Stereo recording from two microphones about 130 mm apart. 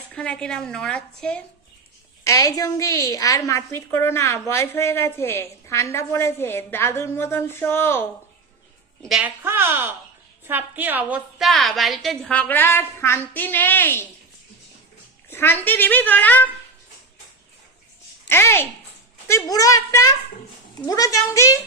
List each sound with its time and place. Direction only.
0.1 s a woman's voice: 10° left (ahead or behind)
2.2 s a woman's voice: 25° left (ahead or behind)
9.0 s a woman's voice: centre (ahead or behind)
9.2 s a woman's voice: 20° right (ahead or behind)
11.3 s a woman's voice: centre (ahead or behind); by 14.1 s 15° left (ahead or behind)
15.3 s a woman's voice: 15° left (ahead or behind)
18.3 s a woman's voice: 20° left (ahead or behind)